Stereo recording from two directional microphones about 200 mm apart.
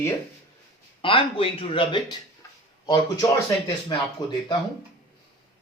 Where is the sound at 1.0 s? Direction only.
25° left (ahead or behind).